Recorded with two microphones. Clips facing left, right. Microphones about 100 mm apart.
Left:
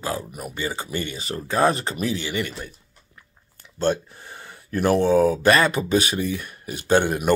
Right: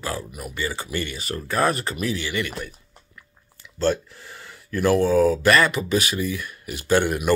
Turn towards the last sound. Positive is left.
turn(degrees=25)  # may be behind; listen again after turning